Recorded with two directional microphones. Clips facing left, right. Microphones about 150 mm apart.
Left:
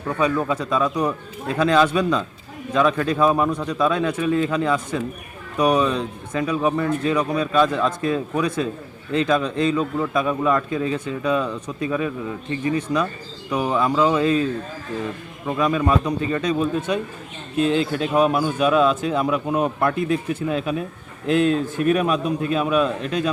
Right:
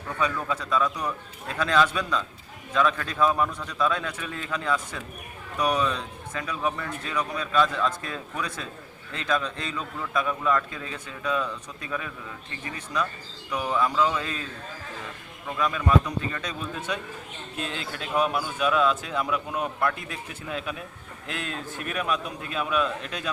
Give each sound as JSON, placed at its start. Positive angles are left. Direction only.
{"t": 0.4, "sound": "speech", "side_deg": 20}
{"t": 0.9, "sound": "speech", "side_deg": 35}
{"t": 1.5, "sound": "a man's voice", "side_deg": 20}
{"t": 15.4, "sound": "speech", "side_deg": 20}
{"t": 17.6, "sound": "speech", "side_deg": 20}